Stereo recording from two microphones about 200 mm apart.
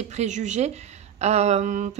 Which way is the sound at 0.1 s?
35° right (ahead or behind).